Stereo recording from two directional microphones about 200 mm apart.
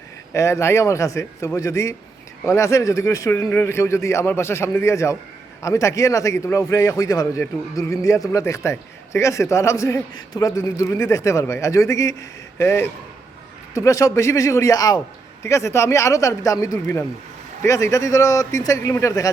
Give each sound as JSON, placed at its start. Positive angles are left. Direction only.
{"t": 0.3, "sound": "a man's voice", "side_deg": 15}